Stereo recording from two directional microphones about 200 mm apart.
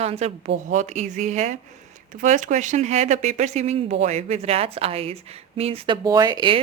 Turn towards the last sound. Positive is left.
turn(degrees=-20)  # may be behind; listen again after turning